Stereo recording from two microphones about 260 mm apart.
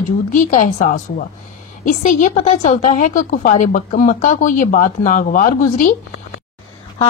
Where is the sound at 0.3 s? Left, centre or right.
Left.